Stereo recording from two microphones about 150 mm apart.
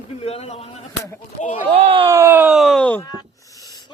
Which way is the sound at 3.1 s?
25° left (ahead or behind).